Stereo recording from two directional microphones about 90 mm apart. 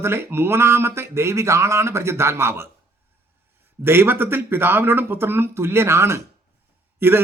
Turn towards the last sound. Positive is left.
turn(degrees=-25)  # may be behind; listen again after turning